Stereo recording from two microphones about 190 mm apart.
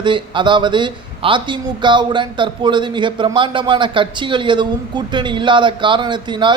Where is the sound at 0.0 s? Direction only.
25° right (ahead or behind).